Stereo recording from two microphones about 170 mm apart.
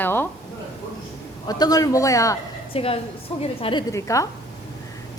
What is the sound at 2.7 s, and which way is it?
A woman's voice, 35° left (ahead or behind).